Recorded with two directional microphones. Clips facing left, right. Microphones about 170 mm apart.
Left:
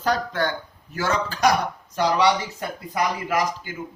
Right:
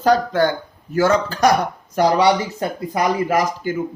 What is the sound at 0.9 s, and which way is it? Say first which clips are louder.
Speech: right 8 dB; 45° right (ahead or behind).